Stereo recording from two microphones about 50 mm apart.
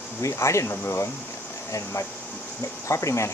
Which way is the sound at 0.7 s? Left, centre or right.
Left.